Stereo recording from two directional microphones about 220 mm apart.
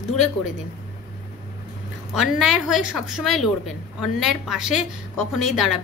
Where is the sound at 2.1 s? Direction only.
Centre (ahead or behind).